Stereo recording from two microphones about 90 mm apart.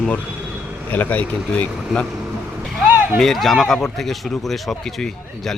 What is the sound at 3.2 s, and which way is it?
A man's voice, 5° left (ahead or behind).